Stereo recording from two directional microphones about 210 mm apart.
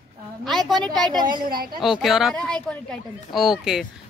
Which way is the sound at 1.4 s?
45° right (ahead or behind).